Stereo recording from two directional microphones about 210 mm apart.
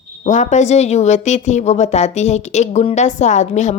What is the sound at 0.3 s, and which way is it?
Speech, 35° left (ahead or behind).